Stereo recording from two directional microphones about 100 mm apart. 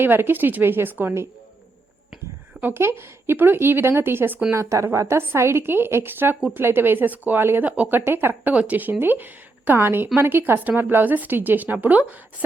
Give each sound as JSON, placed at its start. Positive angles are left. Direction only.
{"t": 0.0, "sound": "speech", "side_deg": -20}
{"t": 2.6, "sound": "speech", "side_deg": -20}